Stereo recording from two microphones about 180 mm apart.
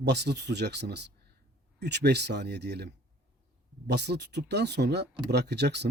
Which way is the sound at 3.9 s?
70° right (ahead or behind).